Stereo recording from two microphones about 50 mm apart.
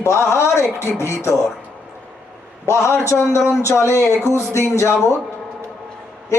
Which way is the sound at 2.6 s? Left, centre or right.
Left.